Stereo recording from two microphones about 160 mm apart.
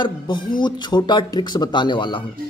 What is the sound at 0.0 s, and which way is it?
A man's voice, 30° left (ahead or behind).